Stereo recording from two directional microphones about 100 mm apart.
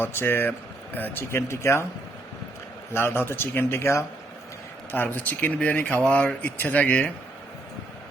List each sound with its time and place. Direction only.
0.0 s speech: 20° left (ahead or behind)
2.9 s speech: 25° left (ahead or behind)